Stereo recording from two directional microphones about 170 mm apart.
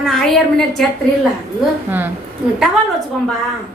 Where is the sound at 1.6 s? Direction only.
10° right (ahead or behind).